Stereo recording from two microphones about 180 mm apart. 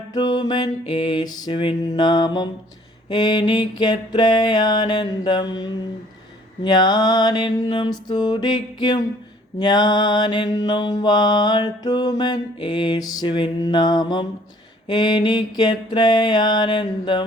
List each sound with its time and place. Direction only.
0.1 s mantra: 25° left (ahead or behind)